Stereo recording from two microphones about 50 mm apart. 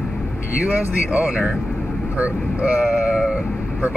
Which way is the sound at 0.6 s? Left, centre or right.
Right.